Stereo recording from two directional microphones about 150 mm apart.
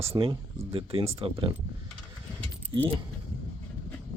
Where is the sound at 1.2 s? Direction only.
35° right (ahead or behind).